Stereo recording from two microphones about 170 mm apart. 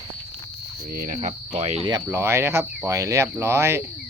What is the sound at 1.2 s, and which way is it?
Speech, 40° right (ahead or behind).